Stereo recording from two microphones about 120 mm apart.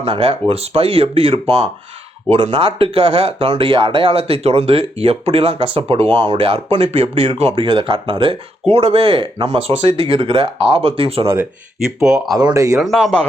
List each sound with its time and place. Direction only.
0.0 s speech: 50° right (ahead or behind)
7.5 s speech: 45° right (ahead or behind)
12.0 s speech: 10° right (ahead or behind)
12.3 s speech: 35° right (ahead or behind)
12.7 s speech: centre (ahead or behind)